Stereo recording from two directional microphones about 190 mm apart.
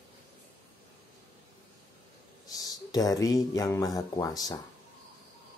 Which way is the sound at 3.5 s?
15° left (ahead or behind).